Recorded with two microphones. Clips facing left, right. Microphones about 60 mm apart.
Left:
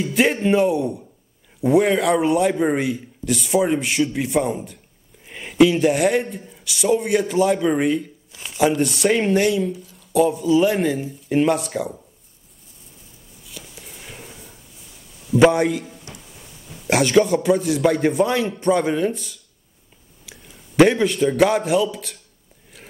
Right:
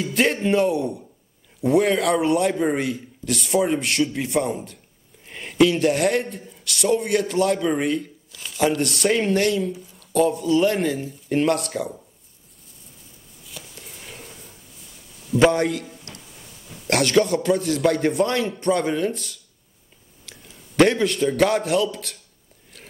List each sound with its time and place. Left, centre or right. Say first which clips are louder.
0.0 s speech: left 2 dB; centre
8.3 s tearing: left 1 dB; left
8.5 s speech: left 3 dB; centre
13.5 s a sound: left 1 dB; centre
15.2 s a man's voice: left 3 dB; centre